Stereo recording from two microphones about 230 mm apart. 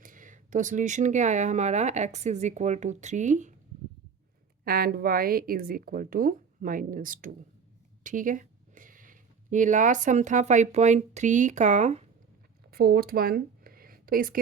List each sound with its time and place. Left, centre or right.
0.0 s speech: right
4.6 s speech: right
12.7 s speech: right